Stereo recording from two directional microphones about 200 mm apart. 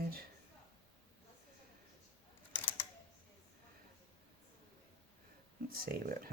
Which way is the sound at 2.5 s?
10° left (ahead or behind).